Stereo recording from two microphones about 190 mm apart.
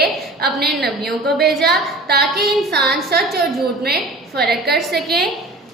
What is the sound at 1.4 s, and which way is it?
Speech, centre (ahead or behind).